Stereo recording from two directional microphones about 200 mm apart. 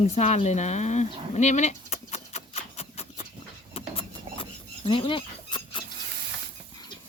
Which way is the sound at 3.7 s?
25° left (ahead or behind).